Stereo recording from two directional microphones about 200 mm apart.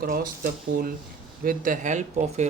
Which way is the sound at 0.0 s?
45° right (ahead or behind).